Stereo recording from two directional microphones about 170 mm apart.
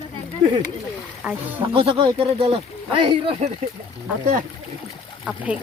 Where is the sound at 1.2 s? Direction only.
10° right (ahead or behind).